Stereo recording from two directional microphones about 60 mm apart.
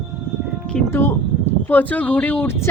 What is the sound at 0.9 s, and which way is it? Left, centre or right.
Speech, left.